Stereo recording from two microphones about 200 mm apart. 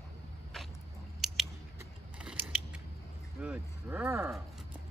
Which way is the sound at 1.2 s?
Centre (ahead or behind).